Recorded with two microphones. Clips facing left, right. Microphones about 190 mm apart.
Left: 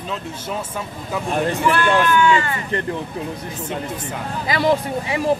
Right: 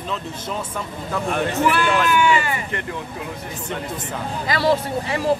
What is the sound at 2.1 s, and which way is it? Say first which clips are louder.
Speech: left 2 dB; 10° right (ahead or behind).